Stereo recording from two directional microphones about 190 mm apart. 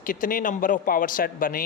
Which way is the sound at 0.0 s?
45° left (ahead or behind).